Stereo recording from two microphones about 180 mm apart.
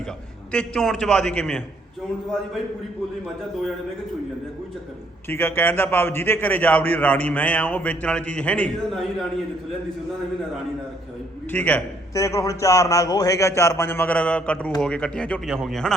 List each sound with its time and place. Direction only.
0.5 s speech: 5° left (ahead or behind)
5.3 s a man's voice: 10° left (ahead or behind)
11.5 s a man's voice: 10° left (ahead or behind)